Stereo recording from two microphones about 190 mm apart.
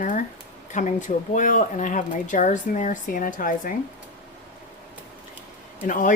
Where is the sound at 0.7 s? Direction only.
40° left (ahead or behind).